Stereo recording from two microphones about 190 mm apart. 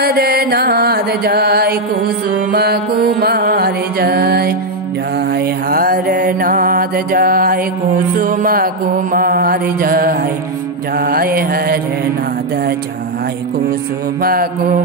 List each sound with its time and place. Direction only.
0.0 s mantra: 55° right (ahead or behind)
2.5 s music: 55° right (ahead or behind)
5.3 s mantra: 50° right (ahead or behind)
14.2 s mantra: 50° right (ahead or behind)